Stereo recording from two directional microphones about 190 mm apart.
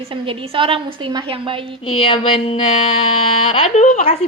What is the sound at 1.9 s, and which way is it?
A woman's voice, 30° left (ahead or behind).